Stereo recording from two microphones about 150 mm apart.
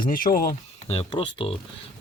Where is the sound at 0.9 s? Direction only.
40° left (ahead or behind).